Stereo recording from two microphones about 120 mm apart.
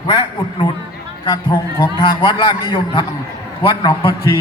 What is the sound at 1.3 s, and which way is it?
A man's voice, 35° left (ahead or behind).